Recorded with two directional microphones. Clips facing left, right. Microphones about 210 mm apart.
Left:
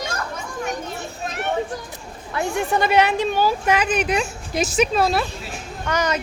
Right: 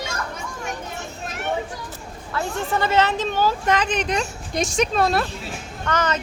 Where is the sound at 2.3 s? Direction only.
15° left (ahead or behind).